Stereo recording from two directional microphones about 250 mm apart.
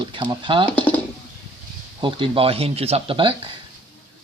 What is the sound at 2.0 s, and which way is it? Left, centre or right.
Speech, right.